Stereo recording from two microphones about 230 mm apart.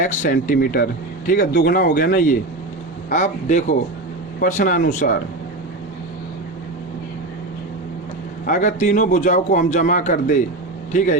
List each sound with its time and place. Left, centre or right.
0.0 s a man's voice: left
8.4 s a man's voice: left